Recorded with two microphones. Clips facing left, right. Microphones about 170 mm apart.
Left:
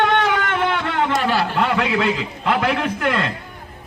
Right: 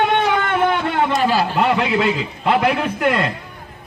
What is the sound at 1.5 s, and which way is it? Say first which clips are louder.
A man's voice: right 2 dB; 10° right (ahead or behind).